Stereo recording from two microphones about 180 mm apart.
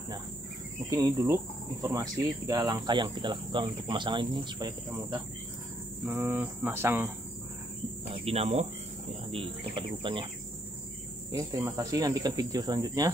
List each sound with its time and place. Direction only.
0.8 s cricket: 20° right (ahead or behind)
1.8 s speech: 20° right (ahead or behind)
6.0 s cricket: 10° right (ahead or behind)
8.1 s speech: 35° right (ahead or behind)
11.3 s speech: 20° right (ahead or behind)